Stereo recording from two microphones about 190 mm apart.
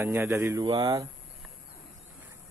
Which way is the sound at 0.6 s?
25° right (ahead or behind).